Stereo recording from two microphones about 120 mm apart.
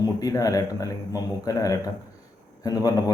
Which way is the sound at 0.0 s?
30° left (ahead or behind).